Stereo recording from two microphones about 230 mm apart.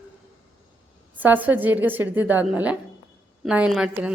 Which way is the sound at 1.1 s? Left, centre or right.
Centre.